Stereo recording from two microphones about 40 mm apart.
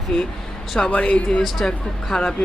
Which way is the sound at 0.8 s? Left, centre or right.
Left.